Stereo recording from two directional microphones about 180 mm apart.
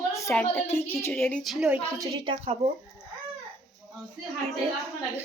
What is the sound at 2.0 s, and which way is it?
Speech, 30° right (ahead or behind).